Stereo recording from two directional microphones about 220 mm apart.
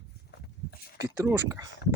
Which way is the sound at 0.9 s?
15° right (ahead or behind).